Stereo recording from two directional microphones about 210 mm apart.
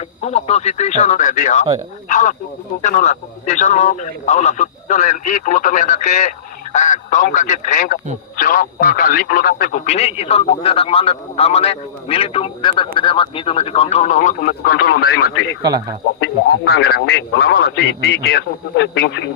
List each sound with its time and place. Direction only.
0.2 s speech: 30° left (ahead or behind)
15.6 s speech: 20° right (ahead or behind)
16.6 s speech: 50° left (ahead or behind)